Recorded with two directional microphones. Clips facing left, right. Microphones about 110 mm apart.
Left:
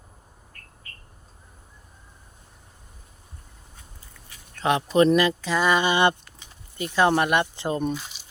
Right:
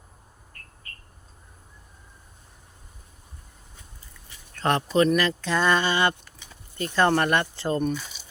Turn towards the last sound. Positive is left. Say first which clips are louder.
# even
turn(degrees=15)  # may be behind; listen again after turning